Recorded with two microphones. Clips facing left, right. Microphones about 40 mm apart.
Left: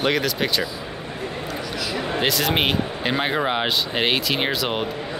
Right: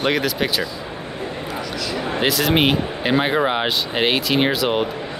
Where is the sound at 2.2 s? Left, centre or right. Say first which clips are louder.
Right 4 dB; centre.